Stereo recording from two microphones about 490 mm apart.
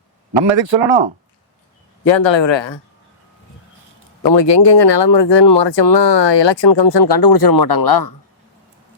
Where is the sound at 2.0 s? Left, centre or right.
Left.